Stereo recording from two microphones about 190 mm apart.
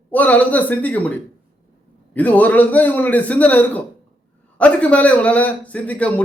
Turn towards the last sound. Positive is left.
turn(degrees=5)  # may be behind; listen again after turning